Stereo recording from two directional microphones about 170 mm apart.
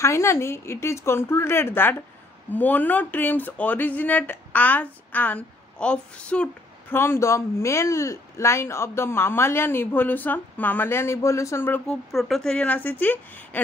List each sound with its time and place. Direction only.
0.0 s speech: 15° left (ahead or behind)
12.1 s speech: centre (ahead or behind)